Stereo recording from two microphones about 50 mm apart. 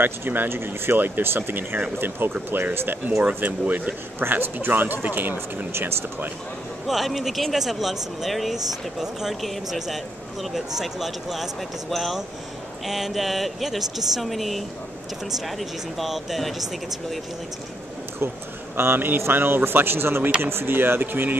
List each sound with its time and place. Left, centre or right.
0.0 s speech: right
3.4 s speech: right
4.2 s speech: right
5.7 s speech: right
6.9 s speech: centre
16.0 s speech: centre
18.8 s speech: right